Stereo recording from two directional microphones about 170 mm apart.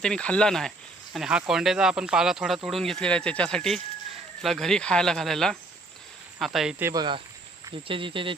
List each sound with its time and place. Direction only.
0.0 s speech: 5° left (ahead or behind)
6.8 s speech: 25° right (ahead or behind)